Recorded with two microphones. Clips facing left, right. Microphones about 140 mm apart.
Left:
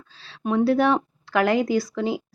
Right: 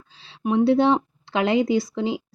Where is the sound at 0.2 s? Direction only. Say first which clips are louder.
Right 1 dB; 20° right (ahead or behind).